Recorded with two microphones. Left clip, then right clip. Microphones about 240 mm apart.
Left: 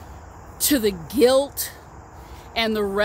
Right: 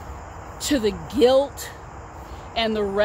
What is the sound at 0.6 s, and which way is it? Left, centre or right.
Speech, left.